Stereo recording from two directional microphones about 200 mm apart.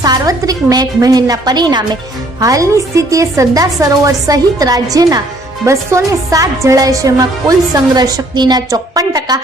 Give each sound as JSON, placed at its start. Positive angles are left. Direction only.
{"t": 0.0, "sound": "a woman's voice", "side_deg": -20}